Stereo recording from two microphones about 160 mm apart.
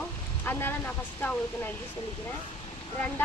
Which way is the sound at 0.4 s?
15° left (ahead or behind).